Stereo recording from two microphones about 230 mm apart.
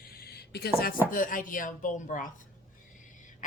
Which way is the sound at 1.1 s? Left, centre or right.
Left.